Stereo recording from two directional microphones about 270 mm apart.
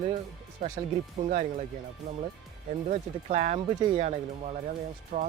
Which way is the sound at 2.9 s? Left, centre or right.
Right.